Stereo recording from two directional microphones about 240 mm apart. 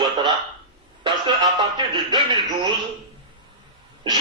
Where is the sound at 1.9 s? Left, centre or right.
Centre.